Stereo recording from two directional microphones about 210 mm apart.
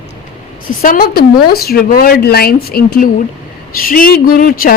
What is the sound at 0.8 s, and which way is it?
Speech, 40° left (ahead or behind).